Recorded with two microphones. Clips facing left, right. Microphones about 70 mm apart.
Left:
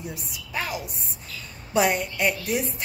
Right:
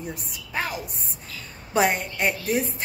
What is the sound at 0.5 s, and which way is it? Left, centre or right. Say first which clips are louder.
A woman's voice: right 1 dB; right.